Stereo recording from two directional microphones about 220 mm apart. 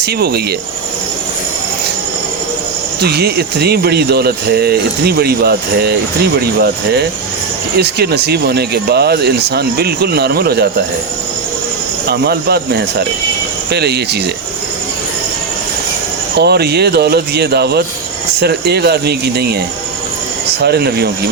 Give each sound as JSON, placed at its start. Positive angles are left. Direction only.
{"t": 0.0, "sound": "speech", "side_deg": -45}
{"t": 3.0, "sound": "speech", "side_deg": -45}
{"t": 12.0, "sound": "speech", "side_deg": -50}
{"t": 16.4, "sound": "speech", "side_deg": -50}
{"t": 20.6, "sound": "speech", "side_deg": -50}